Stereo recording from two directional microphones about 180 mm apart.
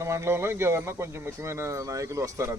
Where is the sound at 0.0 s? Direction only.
15° right (ahead or behind).